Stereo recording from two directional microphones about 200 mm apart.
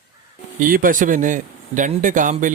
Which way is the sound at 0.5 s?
45° right (ahead or behind).